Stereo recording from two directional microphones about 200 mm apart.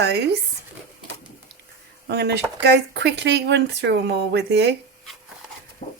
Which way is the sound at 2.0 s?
55° right (ahead or behind).